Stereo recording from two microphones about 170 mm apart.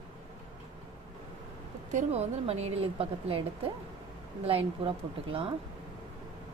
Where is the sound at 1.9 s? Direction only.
40° right (ahead or behind).